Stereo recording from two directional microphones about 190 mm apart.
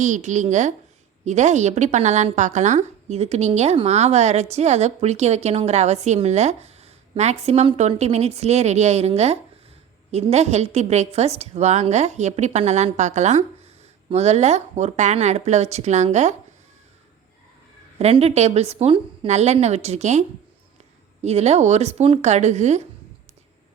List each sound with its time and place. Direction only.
0.0 s a woman's voice: 40° right (ahead or behind)
18.0 s a woman's voice: 35° right (ahead or behind)